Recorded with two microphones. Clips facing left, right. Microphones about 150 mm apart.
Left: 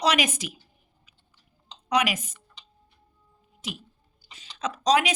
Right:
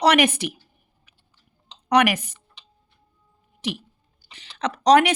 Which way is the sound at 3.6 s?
70° right (ahead or behind).